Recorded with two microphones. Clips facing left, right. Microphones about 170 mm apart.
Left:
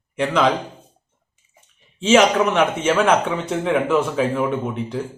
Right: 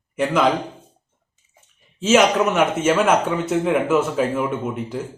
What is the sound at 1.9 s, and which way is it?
A man's voice, 5° right (ahead or behind).